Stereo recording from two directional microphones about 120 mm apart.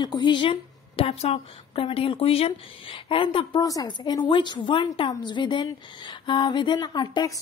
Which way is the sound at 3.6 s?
35° left (ahead or behind).